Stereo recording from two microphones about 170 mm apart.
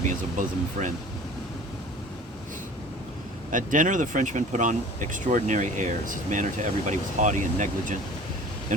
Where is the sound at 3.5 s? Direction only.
50° right (ahead or behind).